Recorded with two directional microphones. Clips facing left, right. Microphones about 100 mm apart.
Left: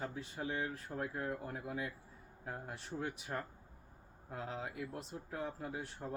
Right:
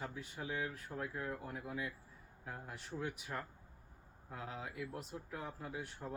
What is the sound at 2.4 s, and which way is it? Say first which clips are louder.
Speech: left 3 dB; 35° left (ahead or behind).